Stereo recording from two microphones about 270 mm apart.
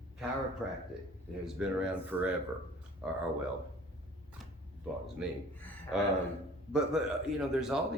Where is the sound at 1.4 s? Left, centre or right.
Centre.